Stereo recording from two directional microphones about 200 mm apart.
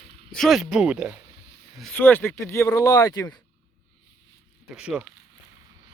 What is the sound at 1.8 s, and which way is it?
Speech, 5° left (ahead or behind).